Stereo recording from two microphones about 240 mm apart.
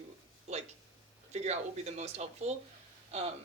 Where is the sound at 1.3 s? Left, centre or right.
Right.